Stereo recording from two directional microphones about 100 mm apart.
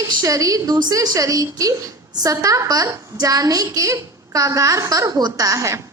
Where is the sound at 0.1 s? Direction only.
35° right (ahead or behind).